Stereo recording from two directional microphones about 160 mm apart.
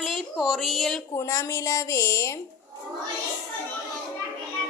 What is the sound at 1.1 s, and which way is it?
A woman's voice, 20° left (ahead or behind).